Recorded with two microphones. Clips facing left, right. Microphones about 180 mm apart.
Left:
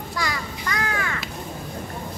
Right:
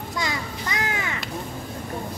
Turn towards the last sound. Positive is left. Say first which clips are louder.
# left 1 dB
turn(degrees=-20)  # may be behind; listen again after turning